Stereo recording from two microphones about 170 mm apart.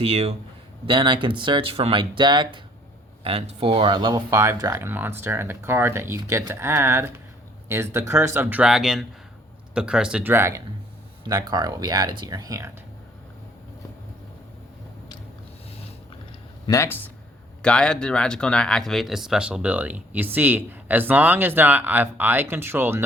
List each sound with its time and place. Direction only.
0.0 s a man's voice: 35° right (ahead or behind); by 12.7 s 20° right (ahead or behind)
16.6 s speech: 15° left (ahead or behind); by 23.0 s 15° right (ahead or behind)